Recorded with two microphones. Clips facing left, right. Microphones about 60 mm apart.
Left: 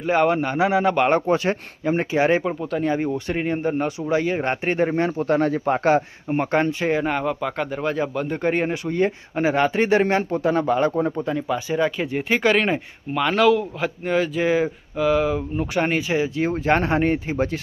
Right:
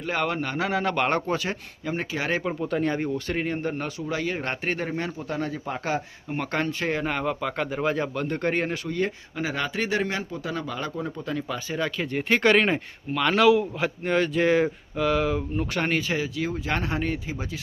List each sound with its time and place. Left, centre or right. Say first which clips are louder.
0.1 s speech: left 8 dB; left
1.3 s speech: left 7 dB; left
2.4 s speech: left 2 dB; centre; by 5.1 s left
5.3 s speech: left 11 dB; left
6.3 s speech: left 7 dB; left
6.8 s speech: left 5 dB; centre
8.9 s speech: left 6 dB; left
11.3 s speech: left 5 dB; centre
16.5 s speech: left 8 dB; left